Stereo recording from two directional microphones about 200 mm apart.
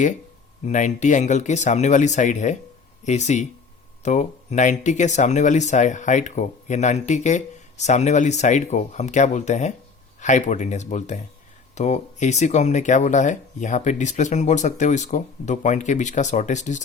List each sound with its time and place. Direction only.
0.6 s speech: 35° left (ahead or behind)